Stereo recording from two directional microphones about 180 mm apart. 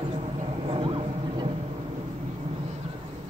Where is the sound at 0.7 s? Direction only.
30° right (ahead or behind).